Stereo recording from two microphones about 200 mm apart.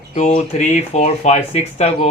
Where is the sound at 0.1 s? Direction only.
35° left (ahead or behind).